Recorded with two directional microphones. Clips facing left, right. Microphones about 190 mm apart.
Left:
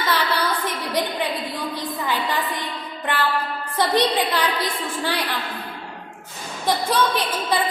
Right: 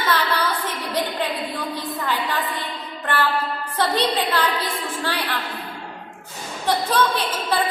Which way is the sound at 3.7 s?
15° left (ahead or behind).